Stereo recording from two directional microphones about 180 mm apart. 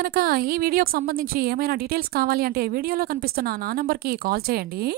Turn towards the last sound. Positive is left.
turn(degrees=-60)  # may be behind; listen again after turning